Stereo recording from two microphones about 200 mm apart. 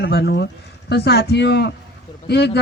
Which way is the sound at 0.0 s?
55° left (ahead or behind).